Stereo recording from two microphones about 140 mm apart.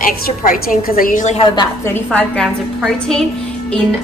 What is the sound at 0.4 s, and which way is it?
Speech, 90° left.